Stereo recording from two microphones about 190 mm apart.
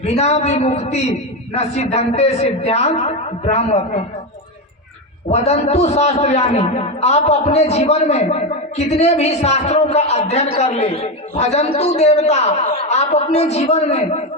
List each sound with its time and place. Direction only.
0.0 s a man's voice: 35° left (ahead or behind)
5.3 s a man's voice: 35° left (ahead or behind)